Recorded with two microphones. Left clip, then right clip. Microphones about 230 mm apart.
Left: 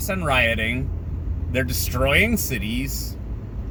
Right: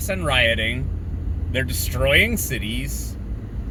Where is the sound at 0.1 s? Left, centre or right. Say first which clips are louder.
Right 1 dB; centre.